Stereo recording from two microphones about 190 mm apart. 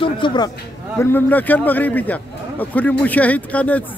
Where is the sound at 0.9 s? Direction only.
10° left (ahead or behind).